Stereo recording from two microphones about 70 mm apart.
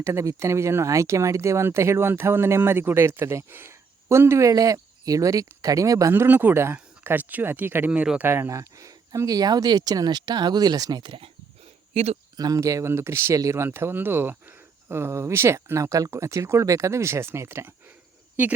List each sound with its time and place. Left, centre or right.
0.0 s speech: right
4.4 s speech: right
6.1 s speech: right
8.4 s speech: right
12.5 s speech: right
13.7 s speech: right
18.4 s speech: right